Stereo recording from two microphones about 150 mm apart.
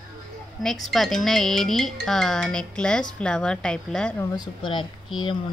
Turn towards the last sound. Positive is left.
turn(degrees=30)  # may be behind; listen again after turning